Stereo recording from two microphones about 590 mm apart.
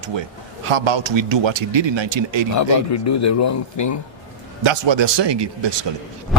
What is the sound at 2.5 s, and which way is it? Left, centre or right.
Speech, left.